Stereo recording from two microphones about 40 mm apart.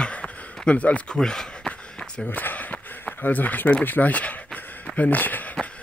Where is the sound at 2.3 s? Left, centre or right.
Left.